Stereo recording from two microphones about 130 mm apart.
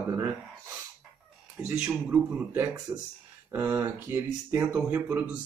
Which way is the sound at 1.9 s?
15° right (ahead or behind).